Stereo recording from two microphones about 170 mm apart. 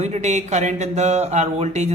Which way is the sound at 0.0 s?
40° right (ahead or behind).